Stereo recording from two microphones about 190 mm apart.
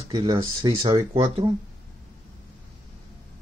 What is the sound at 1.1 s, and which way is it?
Speech, 30° right (ahead or behind).